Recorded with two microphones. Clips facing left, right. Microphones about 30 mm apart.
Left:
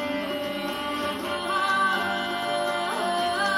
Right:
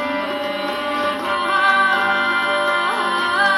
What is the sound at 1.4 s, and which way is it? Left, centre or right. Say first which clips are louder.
Music: right 8 dB; right.